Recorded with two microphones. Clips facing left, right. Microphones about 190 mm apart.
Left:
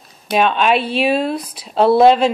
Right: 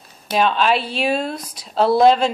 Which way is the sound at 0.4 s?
60° left (ahead or behind).